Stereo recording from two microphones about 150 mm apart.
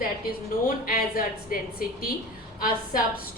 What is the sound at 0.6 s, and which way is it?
Speech, 70° left (ahead or behind).